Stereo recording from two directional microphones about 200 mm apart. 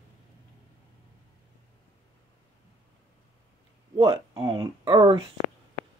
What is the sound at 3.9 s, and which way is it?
Speech, 20° right (ahead or behind).